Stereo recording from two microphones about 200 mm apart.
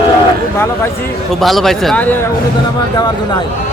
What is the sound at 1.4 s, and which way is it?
Speech, centre (ahead or behind).